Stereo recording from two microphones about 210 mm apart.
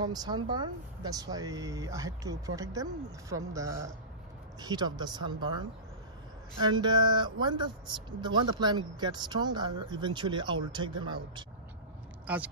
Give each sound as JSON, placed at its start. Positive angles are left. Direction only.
{"t": 0.0, "sound": "speech", "side_deg": -20}
{"t": 12.3, "sound": "speech", "side_deg": -5}